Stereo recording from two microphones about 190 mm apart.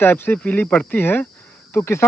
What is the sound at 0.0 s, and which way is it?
Speech, 10° left (ahead or behind).